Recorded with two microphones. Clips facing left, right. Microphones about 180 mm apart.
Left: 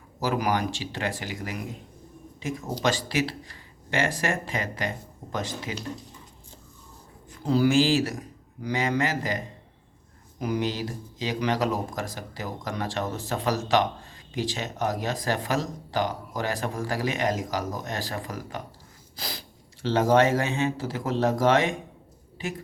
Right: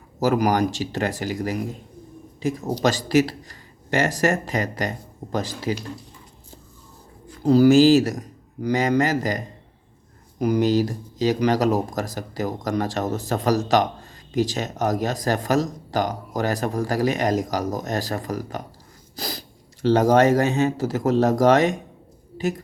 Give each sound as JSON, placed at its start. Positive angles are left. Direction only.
{"t": 0.2, "sound": "speech", "side_deg": -40}
{"t": 7.4, "sound": "speech", "side_deg": -40}
{"t": 22.4, "sound": "a sound", "side_deg": -40}